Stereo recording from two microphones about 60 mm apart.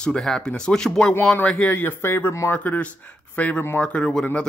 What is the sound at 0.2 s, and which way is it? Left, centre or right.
Speech, centre.